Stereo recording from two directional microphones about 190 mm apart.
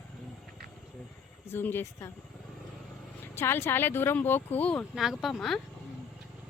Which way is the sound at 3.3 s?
10° left (ahead or behind).